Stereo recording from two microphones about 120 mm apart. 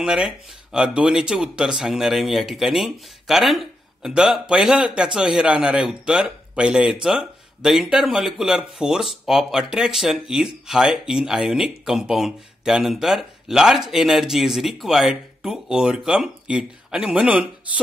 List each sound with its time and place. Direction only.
0.0 s speech: 5° right (ahead or behind)